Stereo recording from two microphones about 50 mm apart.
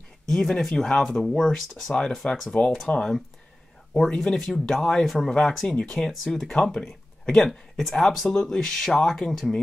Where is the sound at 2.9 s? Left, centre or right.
Left.